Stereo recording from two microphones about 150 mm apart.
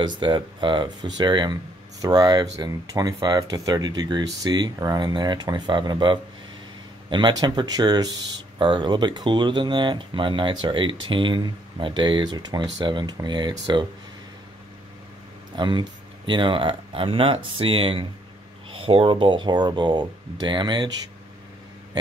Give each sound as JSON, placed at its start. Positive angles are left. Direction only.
{"t": 0.0, "sound": "speech", "side_deg": -30}
{"t": 15.5, "sound": "speech", "side_deg": -30}